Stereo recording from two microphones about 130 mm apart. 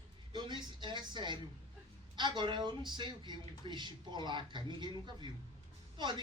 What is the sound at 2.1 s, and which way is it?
Speech, 35° right (ahead or behind).